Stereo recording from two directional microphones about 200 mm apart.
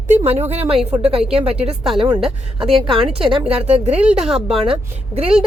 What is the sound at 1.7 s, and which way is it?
Speech, centre (ahead or behind).